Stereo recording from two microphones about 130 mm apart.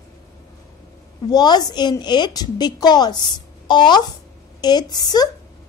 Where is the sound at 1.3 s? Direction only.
30° left (ahead or behind).